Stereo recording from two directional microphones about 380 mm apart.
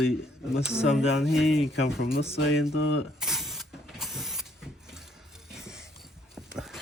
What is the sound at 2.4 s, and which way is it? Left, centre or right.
Speech, left.